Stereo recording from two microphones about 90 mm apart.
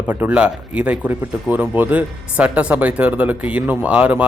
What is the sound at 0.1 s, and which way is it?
Speech, 15° right (ahead or behind).